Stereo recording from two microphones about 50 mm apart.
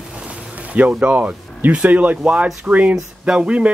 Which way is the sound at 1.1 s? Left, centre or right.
Right.